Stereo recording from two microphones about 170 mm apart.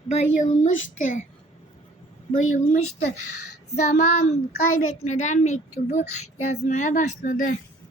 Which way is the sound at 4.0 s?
40° left (ahead or behind).